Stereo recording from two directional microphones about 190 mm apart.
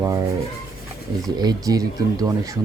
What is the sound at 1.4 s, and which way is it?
Speech, 20° right (ahead or behind).